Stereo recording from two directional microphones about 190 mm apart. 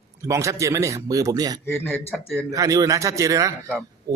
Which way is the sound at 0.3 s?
15° right (ahead or behind).